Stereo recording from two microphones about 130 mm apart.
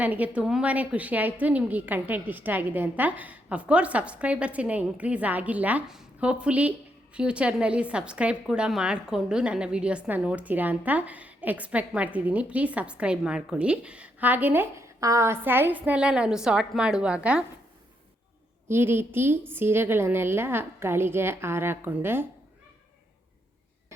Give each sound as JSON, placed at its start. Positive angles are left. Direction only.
{"t": 0.0, "sound": "a woman's voice", "side_deg": -10}
{"t": 18.7, "sound": "a woman's voice", "side_deg": -20}